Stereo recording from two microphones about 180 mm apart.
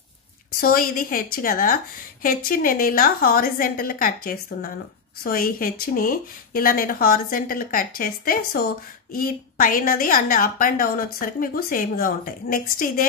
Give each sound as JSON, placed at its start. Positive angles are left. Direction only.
{"t": 0.6, "sound": "a woman's voice", "side_deg": 55}